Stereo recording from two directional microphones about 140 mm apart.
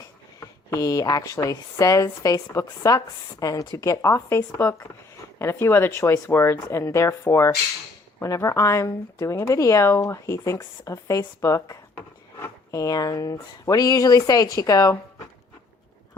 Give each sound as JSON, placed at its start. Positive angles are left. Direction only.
{"t": 0.3, "sound": "speech", "side_deg": 25}